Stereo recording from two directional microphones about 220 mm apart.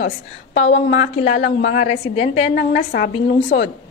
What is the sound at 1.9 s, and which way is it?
Speech, 30° left (ahead or behind).